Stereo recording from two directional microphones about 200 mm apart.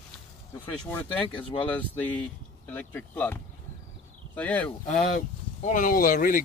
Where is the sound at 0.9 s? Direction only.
25° left (ahead or behind).